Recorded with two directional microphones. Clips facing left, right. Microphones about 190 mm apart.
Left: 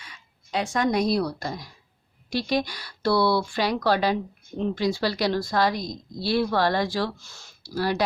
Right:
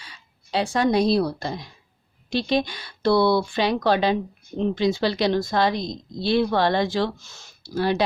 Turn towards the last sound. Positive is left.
turn(degrees=-25)  # may be behind; listen again after turning